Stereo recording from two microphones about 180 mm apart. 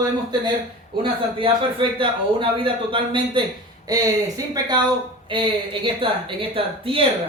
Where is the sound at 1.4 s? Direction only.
30° right (ahead or behind).